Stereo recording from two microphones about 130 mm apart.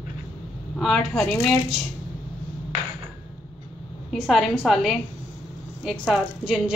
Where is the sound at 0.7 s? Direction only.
5° left (ahead or behind).